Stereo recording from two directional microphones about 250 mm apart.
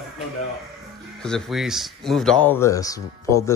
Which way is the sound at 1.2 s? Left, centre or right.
Centre.